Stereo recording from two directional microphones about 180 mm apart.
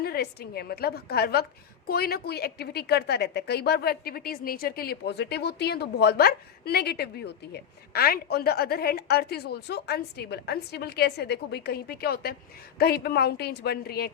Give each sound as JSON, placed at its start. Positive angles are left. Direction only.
{"t": 0.0, "sound": "a woman's voice", "side_deg": 60}